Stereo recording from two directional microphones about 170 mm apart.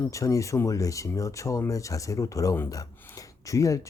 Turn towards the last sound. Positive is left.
turn(degrees=20)  # may be behind; listen again after turning